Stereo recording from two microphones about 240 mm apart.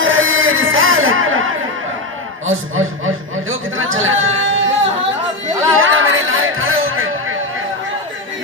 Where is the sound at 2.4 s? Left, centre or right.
Right.